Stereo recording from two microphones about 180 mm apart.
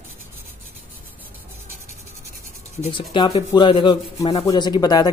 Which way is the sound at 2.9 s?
25° left (ahead or behind).